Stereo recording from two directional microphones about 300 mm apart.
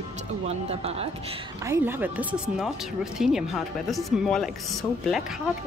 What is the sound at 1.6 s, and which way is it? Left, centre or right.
Speech, centre.